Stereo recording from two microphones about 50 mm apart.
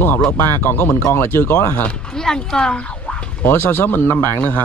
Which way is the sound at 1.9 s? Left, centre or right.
Centre.